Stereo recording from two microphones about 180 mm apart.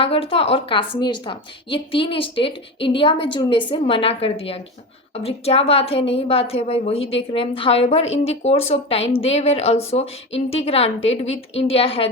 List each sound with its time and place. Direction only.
0.0 s a woman's voice: 30° left (ahead or behind)